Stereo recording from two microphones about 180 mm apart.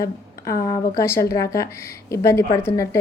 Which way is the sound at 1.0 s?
15° left (ahead or behind).